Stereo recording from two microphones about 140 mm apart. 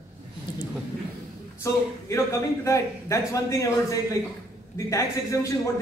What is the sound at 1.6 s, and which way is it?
A man's voice, 20° left (ahead or behind).